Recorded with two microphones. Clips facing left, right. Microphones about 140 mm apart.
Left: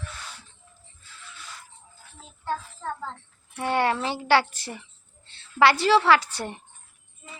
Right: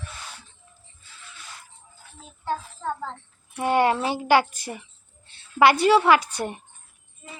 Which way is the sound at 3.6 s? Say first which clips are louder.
Right 3 dB; 20° right (ahead or behind).